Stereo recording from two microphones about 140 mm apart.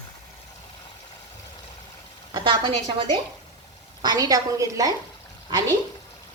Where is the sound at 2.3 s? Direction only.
35° right (ahead or behind).